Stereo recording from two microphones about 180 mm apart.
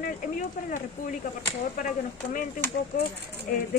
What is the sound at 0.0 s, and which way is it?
Speech, 50° left (ahead or behind).